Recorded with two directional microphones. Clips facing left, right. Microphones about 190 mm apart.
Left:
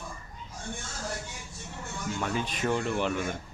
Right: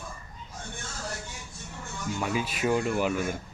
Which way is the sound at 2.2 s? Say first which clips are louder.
Right 2 dB; 5° right (ahead or behind).